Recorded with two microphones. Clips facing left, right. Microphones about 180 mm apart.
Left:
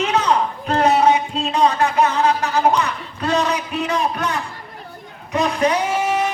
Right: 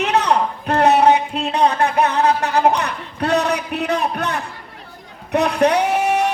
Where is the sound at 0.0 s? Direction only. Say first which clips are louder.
Right 1 dB; 65° right (ahead or behind).